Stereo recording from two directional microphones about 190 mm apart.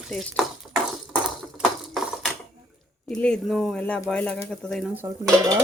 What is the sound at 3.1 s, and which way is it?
Speech, 5° left (ahead or behind).